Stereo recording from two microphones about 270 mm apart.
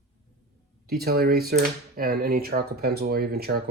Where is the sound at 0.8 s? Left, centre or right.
Right.